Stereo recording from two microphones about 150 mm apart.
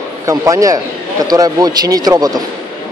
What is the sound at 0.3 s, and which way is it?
A man's voice, 20° right (ahead or behind).